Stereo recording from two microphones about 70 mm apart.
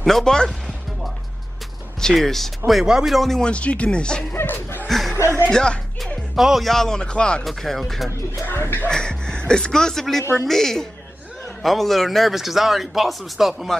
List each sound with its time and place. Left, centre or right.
0.0 s music: centre
2.0 s speech: centre
2.7 s speech: centre
4.3 s speech: left
4.8 s music: centre
5.5 s speech: centre
6.3 s speech: centre
7.4 s a man's voice: centre
8.5 s speech: left
8.8 s a man's voice: centre